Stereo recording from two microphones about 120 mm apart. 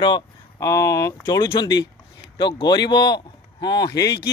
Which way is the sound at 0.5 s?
25° left (ahead or behind).